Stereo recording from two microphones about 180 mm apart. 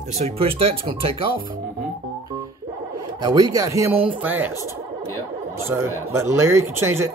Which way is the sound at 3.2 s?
20° right (ahead or behind).